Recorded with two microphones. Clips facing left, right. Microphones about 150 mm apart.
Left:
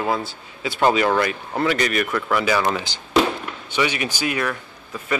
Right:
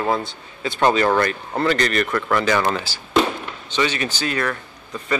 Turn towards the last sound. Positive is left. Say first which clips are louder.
# right 1 dB
turn(degrees=10)  # may be behind; listen again after turning